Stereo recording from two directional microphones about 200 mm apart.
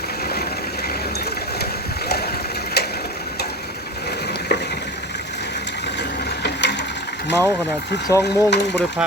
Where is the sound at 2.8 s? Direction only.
55° left (ahead or behind).